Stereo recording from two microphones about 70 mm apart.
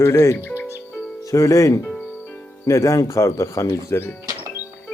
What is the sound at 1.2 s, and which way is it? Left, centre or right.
Speech, left.